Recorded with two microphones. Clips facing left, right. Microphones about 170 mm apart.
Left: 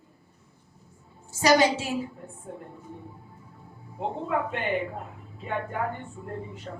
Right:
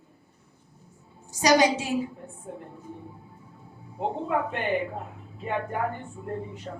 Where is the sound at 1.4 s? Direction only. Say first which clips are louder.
Even; 15° right (ahead or behind).